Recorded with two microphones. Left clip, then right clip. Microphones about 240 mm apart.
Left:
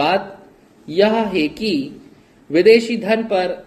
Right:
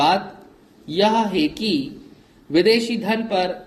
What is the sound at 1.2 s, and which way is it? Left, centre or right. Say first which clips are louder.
A man's voice: left 2 dB; right.